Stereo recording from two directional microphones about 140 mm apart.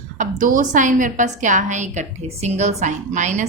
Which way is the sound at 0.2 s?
70° right (ahead or behind).